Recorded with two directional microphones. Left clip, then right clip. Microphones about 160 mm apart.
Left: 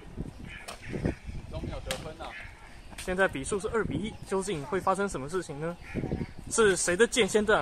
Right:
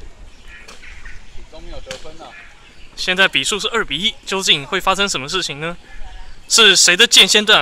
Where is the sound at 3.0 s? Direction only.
15° right (ahead or behind).